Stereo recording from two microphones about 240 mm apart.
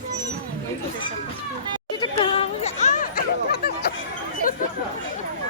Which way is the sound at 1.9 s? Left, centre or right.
Left.